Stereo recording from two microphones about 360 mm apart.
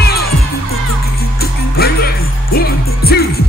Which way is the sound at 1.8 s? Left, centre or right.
Left.